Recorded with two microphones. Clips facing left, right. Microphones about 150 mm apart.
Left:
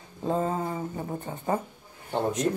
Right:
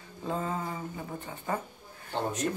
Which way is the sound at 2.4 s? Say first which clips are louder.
Left 5 dB; 20° left (ahead or behind).